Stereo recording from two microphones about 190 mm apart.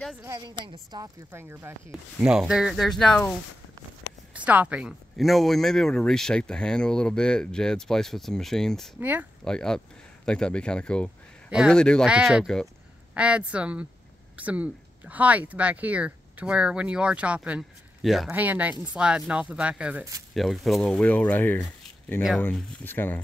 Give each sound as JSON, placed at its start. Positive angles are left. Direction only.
{"t": 0.2, "sound": "a woman's voice", "side_deg": -20}
{"t": 4.3, "sound": "speech", "side_deg": -5}